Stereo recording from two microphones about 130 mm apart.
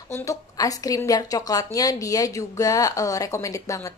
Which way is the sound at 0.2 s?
25° left (ahead or behind).